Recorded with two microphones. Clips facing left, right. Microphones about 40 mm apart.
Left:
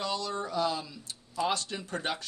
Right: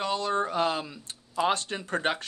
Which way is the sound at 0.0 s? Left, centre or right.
Right.